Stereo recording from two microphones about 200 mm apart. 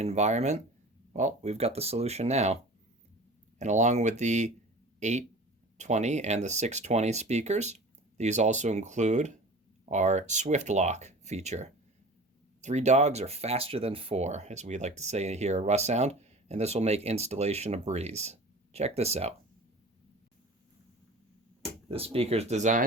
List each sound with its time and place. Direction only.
0.0 s speech: 35° right (ahead or behind)
3.6 s speech: 35° right (ahead or behind)
21.8 s speech: 30° right (ahead or behind)